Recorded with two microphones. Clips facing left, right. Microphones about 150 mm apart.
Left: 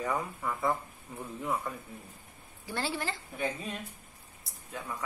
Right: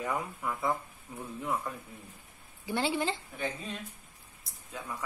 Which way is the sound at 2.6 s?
20° right (ahead or behind).